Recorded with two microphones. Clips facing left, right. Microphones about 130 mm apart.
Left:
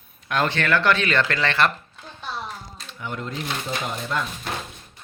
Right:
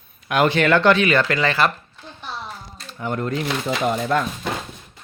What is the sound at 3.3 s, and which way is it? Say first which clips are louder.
Speech: right 6 dB; 90° right.